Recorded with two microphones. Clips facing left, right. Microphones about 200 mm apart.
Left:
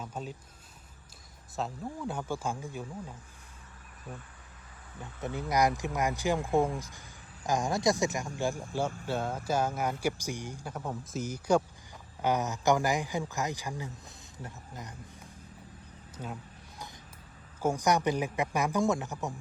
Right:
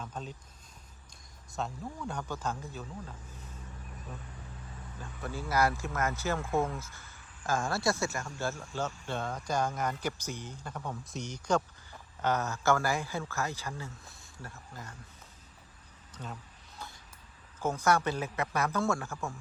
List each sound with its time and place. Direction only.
0.0 s speech: 10° left (ahead or behind)
1.5 s speech: 5° left (ahead or behind)
4.9 s speech: 20° left (ahead or behind)
16.1 s vehicle: 10° left (ahead or behind)
17.6 s speech: 15° left (ahead or behind)